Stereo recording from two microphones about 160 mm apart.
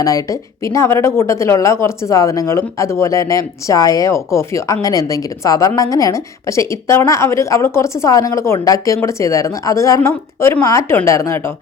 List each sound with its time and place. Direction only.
0.0 s speech: 20° left (ahead or behind)